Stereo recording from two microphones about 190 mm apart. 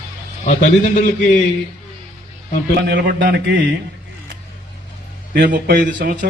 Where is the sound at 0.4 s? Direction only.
45° left (ahead or behind).